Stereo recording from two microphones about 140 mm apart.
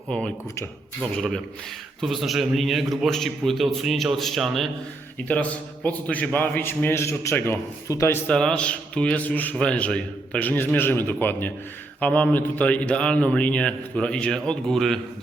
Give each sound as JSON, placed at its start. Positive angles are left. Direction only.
{"t": 1.1, "sound": "a man's voice", "side_deg": 0}
{"t": 8.3, "sound": "a man's voice", "side_deg": 5}